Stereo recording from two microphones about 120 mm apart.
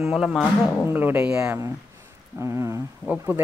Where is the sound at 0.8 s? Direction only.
20° right (ahead or behind).